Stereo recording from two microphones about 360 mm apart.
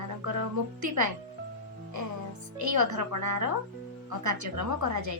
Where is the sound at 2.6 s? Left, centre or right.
Right.